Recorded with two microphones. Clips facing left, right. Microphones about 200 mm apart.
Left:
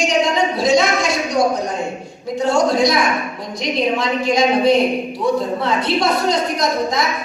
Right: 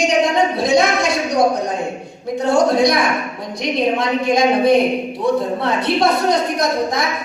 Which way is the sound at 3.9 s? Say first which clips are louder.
Right 1 dB; 55° right (ahead or behind).